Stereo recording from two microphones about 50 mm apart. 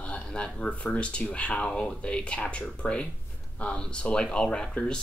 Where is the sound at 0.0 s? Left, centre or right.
Left.